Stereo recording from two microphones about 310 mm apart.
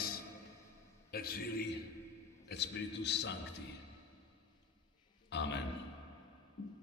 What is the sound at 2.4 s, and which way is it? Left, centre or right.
Speech, left.